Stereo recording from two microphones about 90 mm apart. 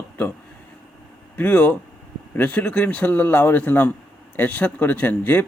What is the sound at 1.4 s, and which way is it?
Speech, 20° left (ahead or behind).